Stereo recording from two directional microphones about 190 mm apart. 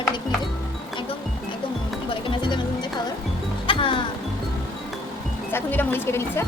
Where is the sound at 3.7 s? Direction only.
25° left (ahead or behind).